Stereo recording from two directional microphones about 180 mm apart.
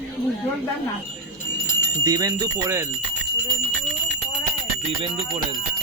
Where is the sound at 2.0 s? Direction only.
20° right (ahead or behind).